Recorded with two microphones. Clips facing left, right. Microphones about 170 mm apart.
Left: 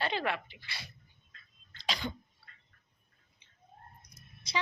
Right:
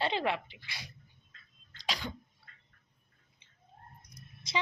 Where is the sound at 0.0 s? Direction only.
25° right (ahead or behind).